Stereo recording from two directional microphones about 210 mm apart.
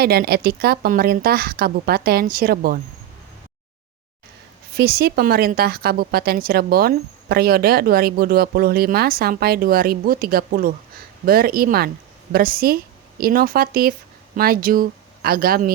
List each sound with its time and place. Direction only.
0.0 s speech: 50° right (ahead or behind)
4.7 s speech: 45° right (ahead or behind)